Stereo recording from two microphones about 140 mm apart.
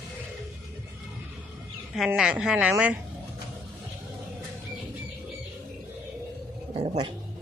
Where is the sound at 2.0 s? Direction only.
Centre (ahead or behind).